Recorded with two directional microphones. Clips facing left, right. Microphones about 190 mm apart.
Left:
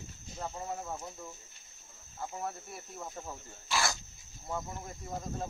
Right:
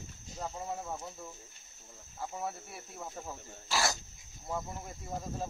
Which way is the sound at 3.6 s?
35° right (ahead or behind).